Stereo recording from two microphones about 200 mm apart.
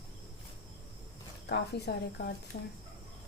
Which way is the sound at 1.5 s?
55° left (ahead or behind).